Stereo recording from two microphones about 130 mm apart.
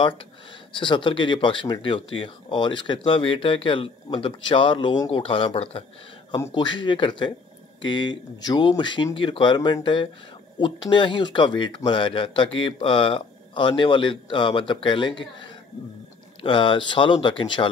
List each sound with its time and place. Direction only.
0.7 s speech: 40° left (ahead or behind)
6.5 s speech: 35° left (ahead or behind)
16.4 s speech: 40° left (ahead or behind)